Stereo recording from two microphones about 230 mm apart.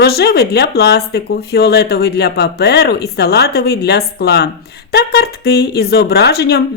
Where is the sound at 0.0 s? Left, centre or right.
Left.